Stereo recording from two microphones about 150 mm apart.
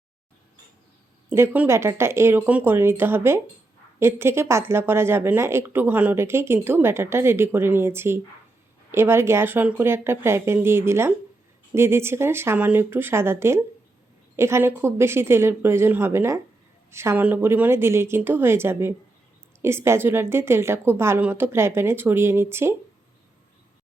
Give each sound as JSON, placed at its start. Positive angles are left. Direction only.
{"t": 1.3, "sound": "speech", "side_deg": -15}